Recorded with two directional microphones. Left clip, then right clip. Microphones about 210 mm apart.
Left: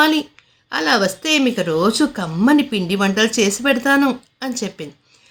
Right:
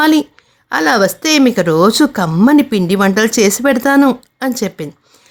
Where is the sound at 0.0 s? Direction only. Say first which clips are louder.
Right 4 dB; 45° right (ahead or behind).